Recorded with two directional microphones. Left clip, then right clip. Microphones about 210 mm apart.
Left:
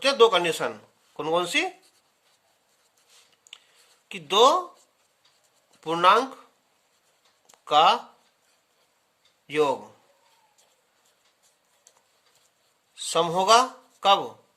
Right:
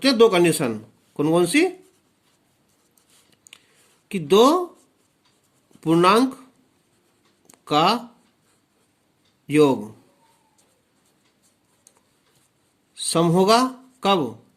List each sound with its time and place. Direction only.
0.0 s speech: 15° right (ahead or behind)
4.1 s speech: 20° right (ahead or behind)
5.8 s speech: 20° right (ahead or behind)
7.5 s speech: 15° right (ahead or behind)
9.5 s speech: 20° right (ahead or behind)
13.1 s speech: 15° right (ahead or behind)